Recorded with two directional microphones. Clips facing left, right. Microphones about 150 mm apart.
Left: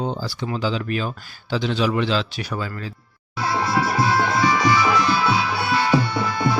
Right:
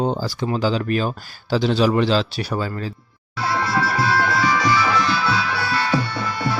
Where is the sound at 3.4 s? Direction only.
15° left (ahead or behind).